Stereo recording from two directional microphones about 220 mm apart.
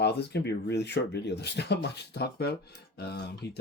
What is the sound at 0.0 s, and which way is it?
Speech, 50° left (ahead or behind).